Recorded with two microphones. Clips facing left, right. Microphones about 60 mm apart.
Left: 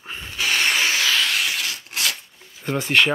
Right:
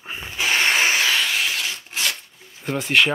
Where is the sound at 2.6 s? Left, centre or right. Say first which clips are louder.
Even; centre.